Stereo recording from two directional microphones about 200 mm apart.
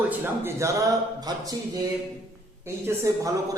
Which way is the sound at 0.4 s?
15° right (ahead or behind).